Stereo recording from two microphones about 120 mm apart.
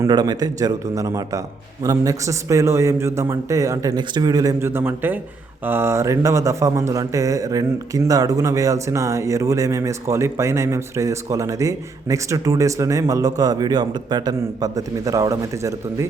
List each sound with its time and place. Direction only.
0.1 s a man's voice: 35° right (ahead or behind)
4.6 s speech: 20° right (ahead or behind)